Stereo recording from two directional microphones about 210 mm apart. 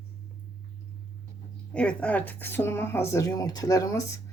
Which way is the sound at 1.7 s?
5° left (ahead or behind).